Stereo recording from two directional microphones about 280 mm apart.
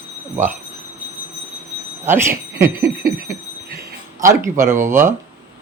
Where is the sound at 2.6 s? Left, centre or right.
Right.